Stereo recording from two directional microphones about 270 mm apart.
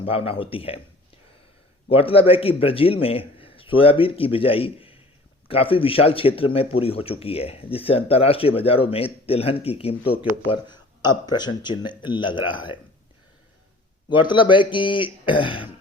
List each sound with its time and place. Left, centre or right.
0.0 s speech: left
1.9 s speech: left
14.1 s speech: centre